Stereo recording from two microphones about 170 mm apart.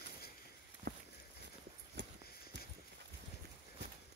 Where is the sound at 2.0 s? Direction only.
90° right.